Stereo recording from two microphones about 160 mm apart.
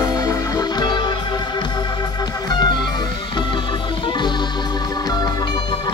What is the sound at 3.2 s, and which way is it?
Organ, 30° left (ahead or behind).